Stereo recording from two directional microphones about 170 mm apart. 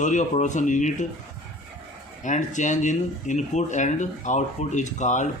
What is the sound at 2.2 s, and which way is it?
Speech, 45° left (ahead or behind).